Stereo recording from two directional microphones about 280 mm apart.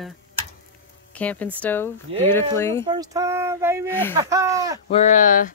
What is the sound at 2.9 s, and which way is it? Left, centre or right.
Speech, centre.